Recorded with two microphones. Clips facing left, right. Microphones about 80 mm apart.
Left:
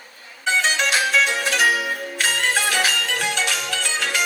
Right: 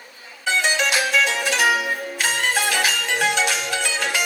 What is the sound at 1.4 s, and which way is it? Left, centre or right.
Music, right.